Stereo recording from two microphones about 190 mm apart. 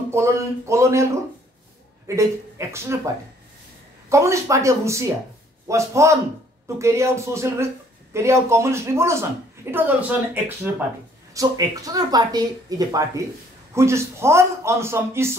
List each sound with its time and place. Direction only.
0.1 s a man's voice: 15° right (ahead or behind)
2.0 s a man's voice: 15° right (ahead or behind)
4.1 s a man's voice: 15° right (ahead or behind)